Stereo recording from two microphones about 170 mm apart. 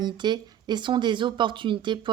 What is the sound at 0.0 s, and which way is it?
Speech, 25° right (ahead or behind).